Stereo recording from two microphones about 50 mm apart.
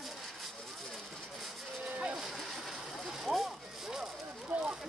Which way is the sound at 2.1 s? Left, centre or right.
Centre.